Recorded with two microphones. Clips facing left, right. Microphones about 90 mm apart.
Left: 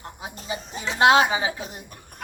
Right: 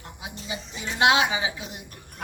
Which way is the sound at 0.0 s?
40° left (ahead or behind).